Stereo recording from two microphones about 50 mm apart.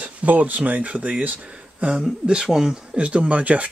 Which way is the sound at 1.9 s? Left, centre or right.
Centre.